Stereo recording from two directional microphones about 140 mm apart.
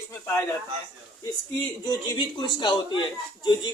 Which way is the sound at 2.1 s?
35° left (ahead or behind).